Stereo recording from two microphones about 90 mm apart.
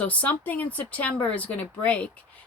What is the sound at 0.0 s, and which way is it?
Speech, 15° left (ahead or behind).